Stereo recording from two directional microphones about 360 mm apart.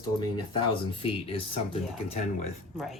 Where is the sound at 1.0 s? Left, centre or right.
Centre.